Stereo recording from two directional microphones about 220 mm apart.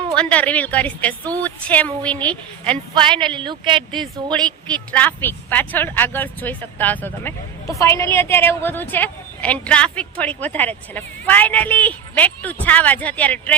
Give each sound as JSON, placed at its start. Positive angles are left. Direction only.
{"t": 0.2, "sound": "a woman's voice", "side_deg": 5}
{"t": 2.6, "sound": "speech", "side_deg": -20}
{"t": 4.0, "sound": "a woman's voice", "side_deg": 5}